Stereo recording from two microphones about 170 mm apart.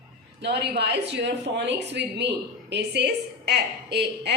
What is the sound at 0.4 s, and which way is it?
A woman's voice, 85° right.